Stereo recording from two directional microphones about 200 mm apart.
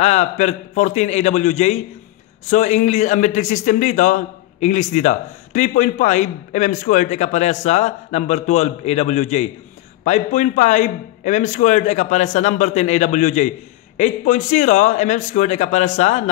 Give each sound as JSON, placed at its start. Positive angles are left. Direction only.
{"t": 0.0, "sound": "a man's voice", "side_deg": 35}